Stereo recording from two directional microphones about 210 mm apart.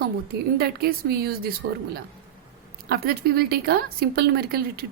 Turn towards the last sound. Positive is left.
turn(degrees=-45)  # may be behind; listen again after turning